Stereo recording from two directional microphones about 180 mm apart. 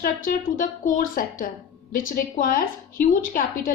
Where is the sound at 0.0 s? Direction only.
50° left (ahead or behind).